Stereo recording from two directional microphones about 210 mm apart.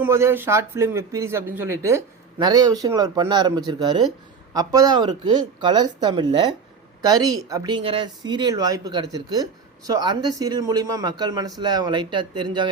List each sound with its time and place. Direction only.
0.0 s a man's voice: 10° right (ahead or behind)